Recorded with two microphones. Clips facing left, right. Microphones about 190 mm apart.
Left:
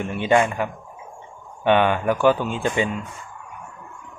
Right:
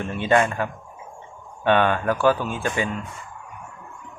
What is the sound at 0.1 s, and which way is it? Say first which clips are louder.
Speech: left 1 dB; 15° left (ahead or behind).